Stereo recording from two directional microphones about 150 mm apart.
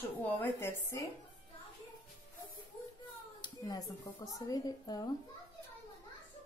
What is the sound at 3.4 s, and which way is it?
A woman's voice, 25° left (ahead or behind).